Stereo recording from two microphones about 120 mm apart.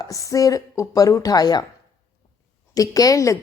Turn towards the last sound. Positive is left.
turn(degrees=25)  # may be behind; listen again after turning